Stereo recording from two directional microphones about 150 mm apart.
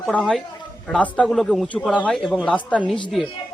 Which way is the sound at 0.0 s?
5° left (ahead or behind).